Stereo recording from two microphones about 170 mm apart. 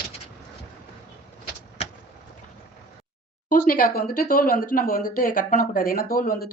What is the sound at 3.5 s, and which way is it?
Speech, 55° left (ahead or behind).